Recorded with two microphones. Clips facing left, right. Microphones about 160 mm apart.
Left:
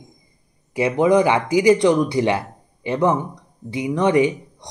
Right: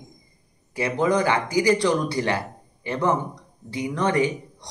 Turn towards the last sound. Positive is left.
turn(degrees=20)  # may be behind; listen again after turning